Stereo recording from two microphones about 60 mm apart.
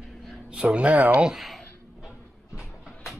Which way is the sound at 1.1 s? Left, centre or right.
Centre.